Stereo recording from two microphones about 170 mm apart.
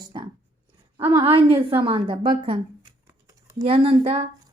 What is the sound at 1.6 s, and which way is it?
Speech, 30° right (ahead or behind).